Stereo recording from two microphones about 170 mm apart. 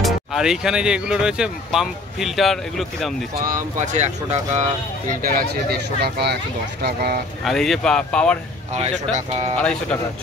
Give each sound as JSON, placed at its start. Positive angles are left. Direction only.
{"t": 0.0, "sound": "speech", "side_deg": 0}
{"t": 3.3, "sound": "speech", "side_deg": -55}
{"t": 5.2, "sound": "speech", "side_deg": -60}
{"t": 7.4, "sound": "speech", "side_deg": 0}
{"t": 9.6, "sound": "speech", "side_deg": 5}